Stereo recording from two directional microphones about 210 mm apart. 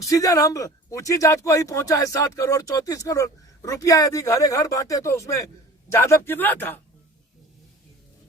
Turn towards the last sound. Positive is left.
turn(degrees=10)  # may be behind; listen again after turning